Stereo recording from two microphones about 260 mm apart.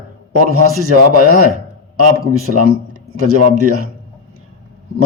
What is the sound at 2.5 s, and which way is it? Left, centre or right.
Speech, right.